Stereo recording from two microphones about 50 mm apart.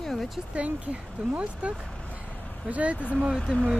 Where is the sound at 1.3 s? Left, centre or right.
Right.